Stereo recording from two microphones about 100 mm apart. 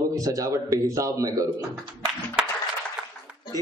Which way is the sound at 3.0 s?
10° right (ahead or behind).